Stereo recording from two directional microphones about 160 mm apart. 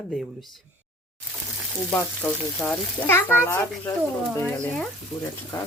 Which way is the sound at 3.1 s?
15° left (ahead or behind).